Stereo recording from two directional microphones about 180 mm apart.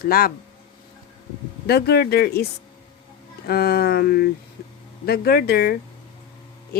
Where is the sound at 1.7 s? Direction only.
60° left (ahead or behind).